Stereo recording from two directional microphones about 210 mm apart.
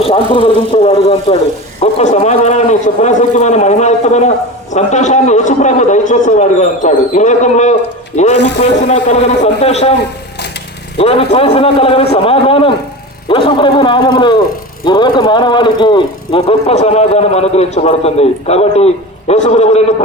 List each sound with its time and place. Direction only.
0.0 s a man's voice: 25° left (ahead or behind)
8.4 s speech: 55° left (ahead or behind)
8.9 s a man's voice: 30° left (ahead or behind)
10.9 s a man's voice: 30° left (ahead or behind)